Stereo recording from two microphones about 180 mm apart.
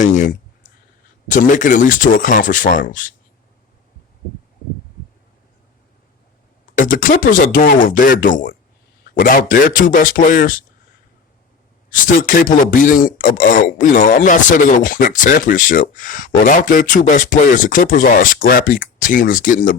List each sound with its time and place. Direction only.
1.3 s speech: 45° left (ahead or behind)
6.7 s speech: 50° left (ahead or behind)
11.9 s speech: 50° left (ahead or behind)